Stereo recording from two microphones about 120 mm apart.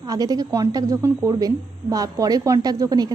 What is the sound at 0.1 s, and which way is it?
A woman's voice, 30° right (ahead or behind).